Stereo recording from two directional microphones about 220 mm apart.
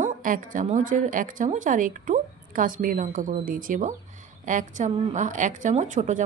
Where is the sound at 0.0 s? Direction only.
35° right (ahead or behind).